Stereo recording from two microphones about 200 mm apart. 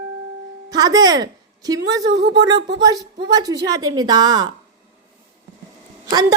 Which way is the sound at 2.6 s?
65° right (ahead or behind).